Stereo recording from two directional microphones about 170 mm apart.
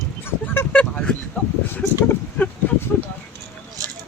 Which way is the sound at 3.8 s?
20° right (ahead or behind).